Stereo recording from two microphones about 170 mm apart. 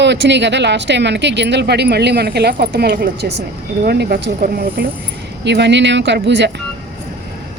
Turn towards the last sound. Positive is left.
turn(degrees=-90)